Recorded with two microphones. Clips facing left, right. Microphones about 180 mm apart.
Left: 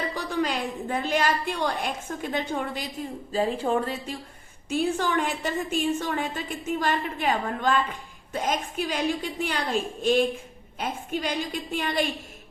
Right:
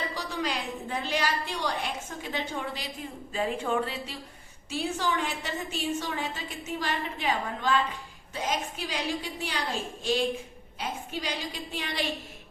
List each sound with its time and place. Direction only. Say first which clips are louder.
0.1 s a woman's voice: left 5 dB; 50° left (ahead or behind)
3.3 s a woman's voice: left 4 dB; 35° left (ahead or behind); by 12.0 s 50° left (ahead or behind)